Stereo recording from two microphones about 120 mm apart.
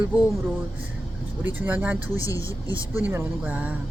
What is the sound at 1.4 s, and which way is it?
Speech, 15° right (ahead or behind).